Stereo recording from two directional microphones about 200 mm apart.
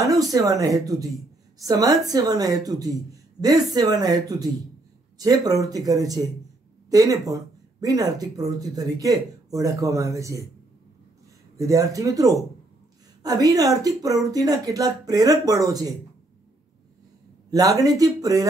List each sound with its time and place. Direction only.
0.0 s a woman's voice: 15° right (ahead or behind)
11.5 s speech: 15° right (ahead or behind)
17.5 s speech: 15° right (ahead or behind)